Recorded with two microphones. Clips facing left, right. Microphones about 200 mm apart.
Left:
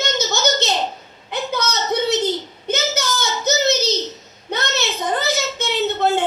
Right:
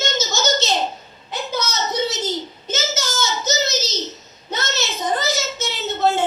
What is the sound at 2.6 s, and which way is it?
Child singing, 60° left (ahead or behind).